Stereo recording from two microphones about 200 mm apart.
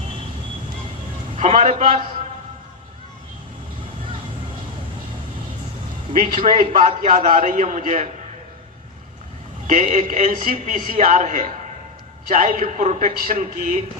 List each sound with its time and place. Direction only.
1.4 s a man's voice: 35° right (ahead or behind)
6.4 s a man's voice: 30° right (ahead or behind)
9.6 s a man's voice: 40° right (ahead or behind)